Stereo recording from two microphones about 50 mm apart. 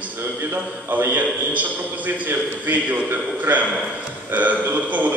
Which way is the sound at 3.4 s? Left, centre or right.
Right.